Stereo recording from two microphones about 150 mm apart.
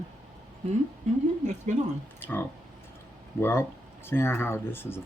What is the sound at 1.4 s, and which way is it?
Speech, 50° right (ahead or behind).